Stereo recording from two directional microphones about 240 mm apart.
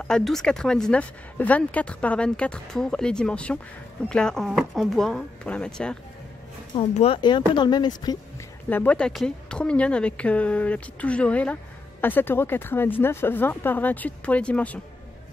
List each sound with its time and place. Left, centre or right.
0.0 s speech: centre
6.7 s speech: left
8.6 s speech: centre